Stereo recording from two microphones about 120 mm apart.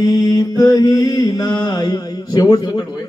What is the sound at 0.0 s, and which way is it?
Mantra, 30° left (ahead or behind).